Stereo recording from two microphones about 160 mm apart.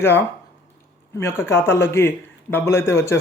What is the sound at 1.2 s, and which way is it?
A man's voice, 15° left (ahead or behind).